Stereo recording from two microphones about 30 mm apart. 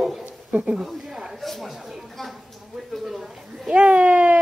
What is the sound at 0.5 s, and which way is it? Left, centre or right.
Speech, right.